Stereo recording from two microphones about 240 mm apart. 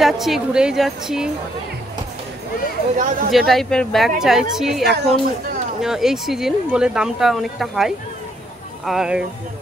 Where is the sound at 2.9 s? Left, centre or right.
Right.